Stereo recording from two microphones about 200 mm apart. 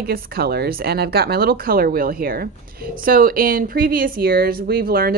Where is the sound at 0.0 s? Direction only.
50° right (ahead or behind).